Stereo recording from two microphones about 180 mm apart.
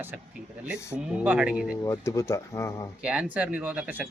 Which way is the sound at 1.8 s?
15° left (ahead or behind).